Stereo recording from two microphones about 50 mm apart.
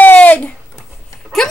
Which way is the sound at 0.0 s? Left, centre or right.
Left.